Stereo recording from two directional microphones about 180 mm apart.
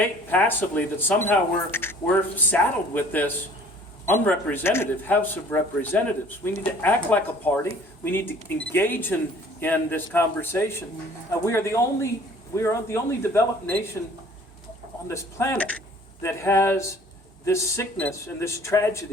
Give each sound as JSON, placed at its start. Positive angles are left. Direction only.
{"t": 0.0, "sound": "speech", "side_deg": 10}
{"t": 15.0, "sound": "speech", "side_deg": 15}